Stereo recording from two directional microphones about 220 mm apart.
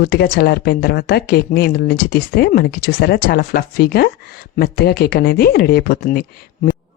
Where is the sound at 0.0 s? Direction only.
45° left (ahead or behind).